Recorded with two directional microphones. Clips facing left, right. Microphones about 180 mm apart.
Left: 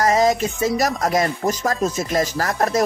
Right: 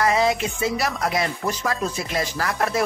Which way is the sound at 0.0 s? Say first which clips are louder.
Left 3 dB; 40° left (ahead or behind).